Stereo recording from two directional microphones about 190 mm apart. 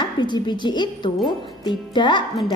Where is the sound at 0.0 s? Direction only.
25° left (ahead or behind).